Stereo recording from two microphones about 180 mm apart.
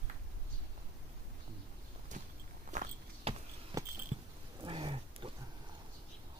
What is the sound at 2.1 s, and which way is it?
Walk, 45° right (ahead or behind).